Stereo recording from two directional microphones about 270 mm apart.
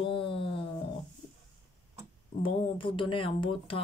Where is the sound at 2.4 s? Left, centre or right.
Centre.